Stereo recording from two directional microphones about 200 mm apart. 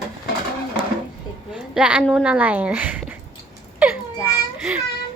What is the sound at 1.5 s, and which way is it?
Speech, 5° right (ahead or behind).